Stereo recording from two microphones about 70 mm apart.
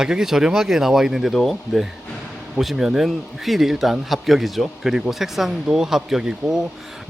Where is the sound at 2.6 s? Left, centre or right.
Centre.